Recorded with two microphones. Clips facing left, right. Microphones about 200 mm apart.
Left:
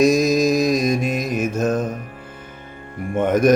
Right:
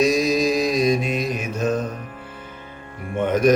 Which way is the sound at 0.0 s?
45° left (ahead or behind).